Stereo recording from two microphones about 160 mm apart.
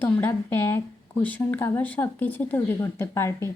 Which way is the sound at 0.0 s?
15° left (ahead or behind).